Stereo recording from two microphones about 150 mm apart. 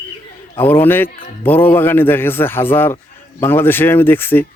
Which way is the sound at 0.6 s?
15° left (ahead or behind).